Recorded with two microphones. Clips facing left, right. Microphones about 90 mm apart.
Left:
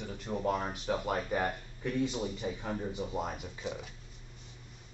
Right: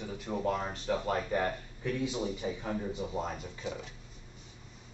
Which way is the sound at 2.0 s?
15° right (ahead or behind).